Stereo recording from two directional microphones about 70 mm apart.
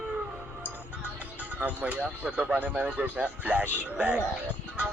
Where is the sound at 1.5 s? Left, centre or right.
Right.